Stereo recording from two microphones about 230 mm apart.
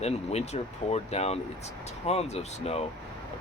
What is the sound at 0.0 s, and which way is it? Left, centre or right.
Speech, left.